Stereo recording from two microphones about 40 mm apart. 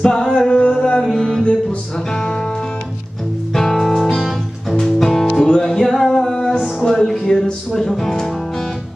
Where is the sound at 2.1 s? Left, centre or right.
Centre.